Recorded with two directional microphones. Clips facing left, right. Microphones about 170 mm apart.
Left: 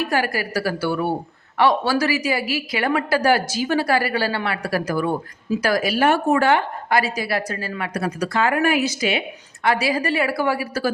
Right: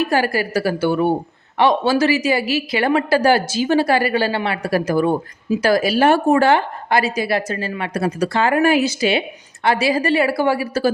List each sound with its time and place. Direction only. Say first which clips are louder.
0.0 s a woman's voice: right 4 dB; 30° right (ahead or behind)